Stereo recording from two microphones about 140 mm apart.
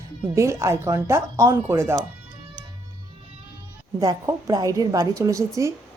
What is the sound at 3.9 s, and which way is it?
A woman's voice, 25° right (ahead or behind).